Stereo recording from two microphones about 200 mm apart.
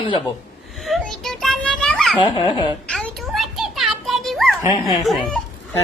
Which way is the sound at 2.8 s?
5° left (ahead or behind).